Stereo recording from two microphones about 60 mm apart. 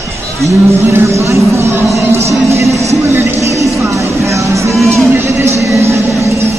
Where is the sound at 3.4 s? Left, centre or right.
Right.